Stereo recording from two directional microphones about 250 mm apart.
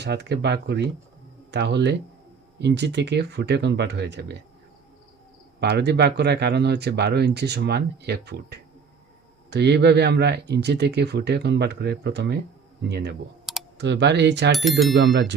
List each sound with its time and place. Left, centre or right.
0.0 s speech: right
5.5 s speech: right
13.4 s computer keyboard: centre
13.7 s speech: right
14.5 s speech: centre
14.9 s speech: right